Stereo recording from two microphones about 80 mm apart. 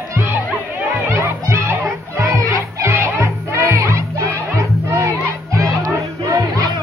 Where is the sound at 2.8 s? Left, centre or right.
Right.